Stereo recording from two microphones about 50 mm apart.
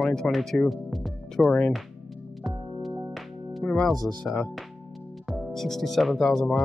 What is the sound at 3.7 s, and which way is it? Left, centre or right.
Speech, centre.